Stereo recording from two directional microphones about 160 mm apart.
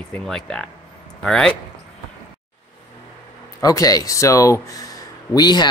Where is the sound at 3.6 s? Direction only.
20° left (ahead or behind).